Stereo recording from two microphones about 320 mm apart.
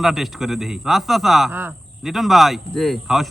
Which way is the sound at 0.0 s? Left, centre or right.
Centre.